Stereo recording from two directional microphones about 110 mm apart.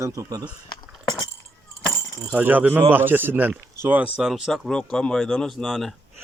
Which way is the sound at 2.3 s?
15° right (ahead or behind).